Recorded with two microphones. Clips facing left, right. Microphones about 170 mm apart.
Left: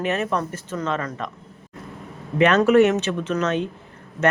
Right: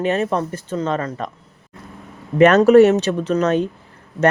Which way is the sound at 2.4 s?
40° right (ahead or behind).